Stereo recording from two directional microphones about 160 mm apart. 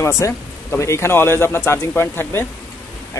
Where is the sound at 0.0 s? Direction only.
20° left (ahead or behind).